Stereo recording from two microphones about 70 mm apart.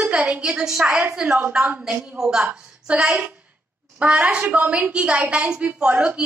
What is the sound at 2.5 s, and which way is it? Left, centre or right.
A woman's voice, centre.